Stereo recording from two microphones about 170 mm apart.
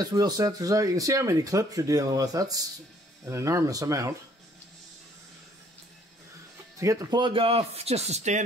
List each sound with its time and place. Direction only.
0.0 s speech: 25° right (ahead or behind)
6.8 s speech: 20° right (ahead or behind); by 8.4 s 40° right (ahead or behind)